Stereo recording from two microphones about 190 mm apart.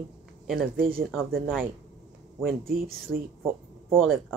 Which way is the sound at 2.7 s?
50° right (ahead or behind).